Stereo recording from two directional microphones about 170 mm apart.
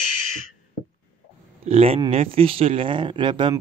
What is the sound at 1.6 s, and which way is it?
Speech, 35° right (ahead or behind).